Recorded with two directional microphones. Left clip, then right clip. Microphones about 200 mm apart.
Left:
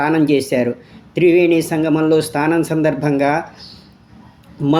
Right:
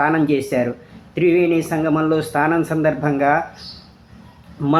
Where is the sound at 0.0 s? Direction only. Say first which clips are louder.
Left 2 dB; 25° left (ahead or behind).